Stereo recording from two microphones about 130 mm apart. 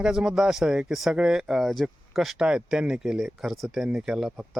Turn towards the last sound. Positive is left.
turn(degrees=0)  # may be behind; listen again after turning